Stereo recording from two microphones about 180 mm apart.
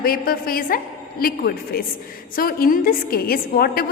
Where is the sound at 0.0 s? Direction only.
55° left (ahead or behind).